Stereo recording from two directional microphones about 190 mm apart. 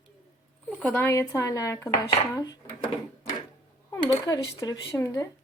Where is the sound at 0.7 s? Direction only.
10° left (ahead or behind).